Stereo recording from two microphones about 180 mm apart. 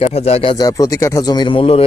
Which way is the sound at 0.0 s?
35° left (ahead or behind).